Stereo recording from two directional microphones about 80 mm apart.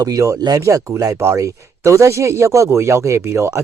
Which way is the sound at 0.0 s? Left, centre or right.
Right.